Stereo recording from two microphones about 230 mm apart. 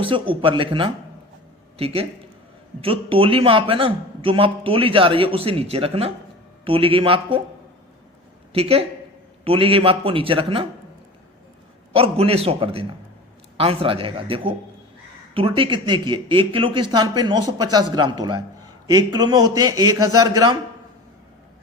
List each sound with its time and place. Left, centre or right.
0.0 s speech: right
8.5 s speech: right
11.9 s speech: right